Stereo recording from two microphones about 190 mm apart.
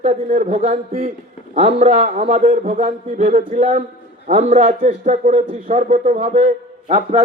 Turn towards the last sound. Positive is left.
turn(degrees=-40)  # may be behind; listen again after turning